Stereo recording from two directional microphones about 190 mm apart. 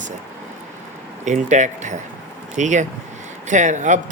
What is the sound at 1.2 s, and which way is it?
Speech, 40° right (ahead or behind).